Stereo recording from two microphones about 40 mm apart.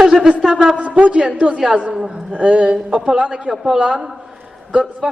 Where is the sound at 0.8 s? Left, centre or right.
Right.